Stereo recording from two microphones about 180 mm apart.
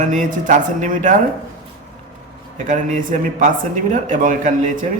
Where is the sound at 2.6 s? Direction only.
45° right (ahead or behind).